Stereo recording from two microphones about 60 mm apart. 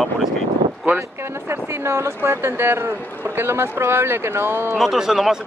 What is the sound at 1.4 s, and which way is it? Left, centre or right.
Speech, right.